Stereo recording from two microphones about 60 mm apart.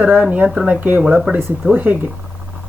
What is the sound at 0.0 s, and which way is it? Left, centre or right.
Speech, right.